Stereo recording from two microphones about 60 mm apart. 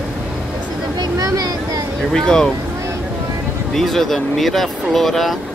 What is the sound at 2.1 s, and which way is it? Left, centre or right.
Speech, centre.